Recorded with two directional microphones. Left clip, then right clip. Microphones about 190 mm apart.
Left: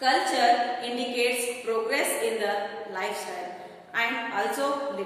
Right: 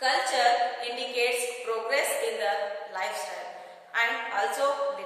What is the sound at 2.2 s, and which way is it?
A woman's voice, 15° right (ahead or behind).